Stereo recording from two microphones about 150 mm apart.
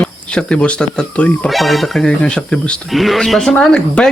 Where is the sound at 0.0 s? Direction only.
5° left (ahead or behind).